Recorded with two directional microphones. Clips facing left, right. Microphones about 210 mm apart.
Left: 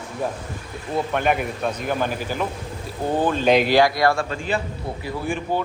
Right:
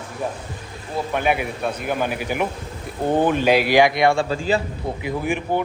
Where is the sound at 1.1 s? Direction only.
5° right (ahead or behind).